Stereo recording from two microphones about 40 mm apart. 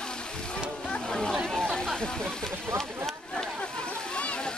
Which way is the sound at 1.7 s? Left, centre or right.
Centre.